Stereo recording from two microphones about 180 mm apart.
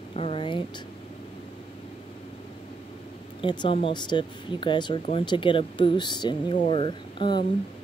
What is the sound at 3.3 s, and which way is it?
Speech, 25° left (ahead or behind).